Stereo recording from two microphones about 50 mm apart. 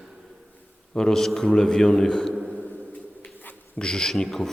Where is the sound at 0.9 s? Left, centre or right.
Centre.